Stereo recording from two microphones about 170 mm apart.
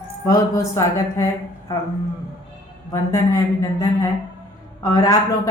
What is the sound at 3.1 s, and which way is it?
Speech, 20° left (ahead or behind).